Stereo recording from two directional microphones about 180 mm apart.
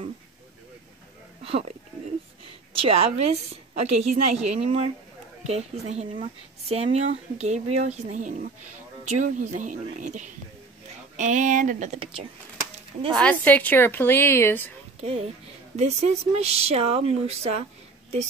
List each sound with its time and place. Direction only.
1.4 s a woman's voice: 35° right (ahead or behind)
13.1 s a woman's voice: 5° left (ahead or behind)
15.0 s speech: 35° right (ahead or behind)